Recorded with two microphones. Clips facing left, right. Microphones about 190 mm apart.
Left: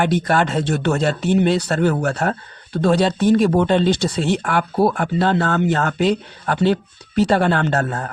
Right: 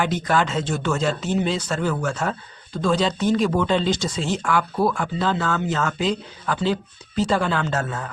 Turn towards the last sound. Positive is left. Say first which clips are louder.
# left 5 dB
turn(degrees=60)  # may be behind; listen again after turning